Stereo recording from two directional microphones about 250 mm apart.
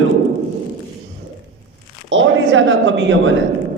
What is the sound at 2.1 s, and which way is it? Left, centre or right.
A man's voice, right.